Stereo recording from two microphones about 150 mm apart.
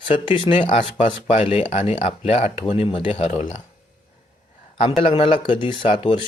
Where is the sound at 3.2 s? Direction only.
55° left (ahead or behind).